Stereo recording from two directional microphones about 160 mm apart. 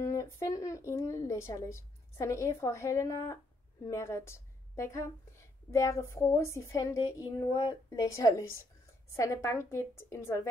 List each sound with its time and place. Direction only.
0.0 s a woman's voice: 20° left (ahead or behind)